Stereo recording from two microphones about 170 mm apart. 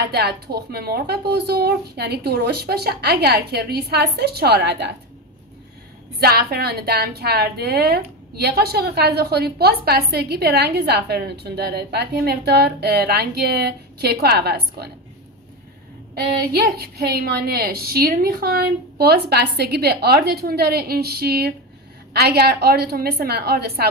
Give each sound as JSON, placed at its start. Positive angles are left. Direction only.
{"t": 0.1, "sound": "a woman's voice", "side_deg": -65}
{"t": 6.1, "sound": "a woman's voice", "side_deg": -65}
{"t": 16.2, "sound": "a woman's voice", "side_deg": -60}